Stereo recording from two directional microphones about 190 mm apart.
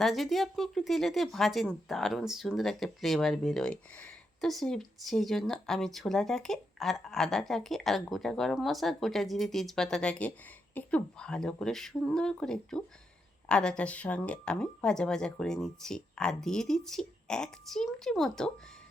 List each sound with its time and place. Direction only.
0.0 s speech: centre (ahead or behind)